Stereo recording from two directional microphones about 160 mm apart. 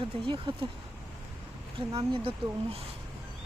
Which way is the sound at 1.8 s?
35° right (ahead or behind).